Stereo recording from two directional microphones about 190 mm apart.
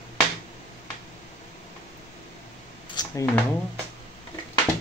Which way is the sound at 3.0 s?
20° left (ahead or behind).